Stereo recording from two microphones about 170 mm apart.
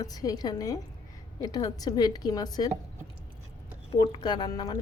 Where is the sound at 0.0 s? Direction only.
20° left (ahead or behind).